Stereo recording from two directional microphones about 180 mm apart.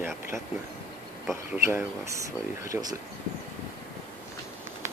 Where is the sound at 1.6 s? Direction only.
15° right (ahead or behind).